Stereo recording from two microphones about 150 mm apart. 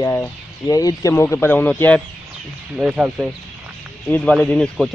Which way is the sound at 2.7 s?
5° right (ahead or behind).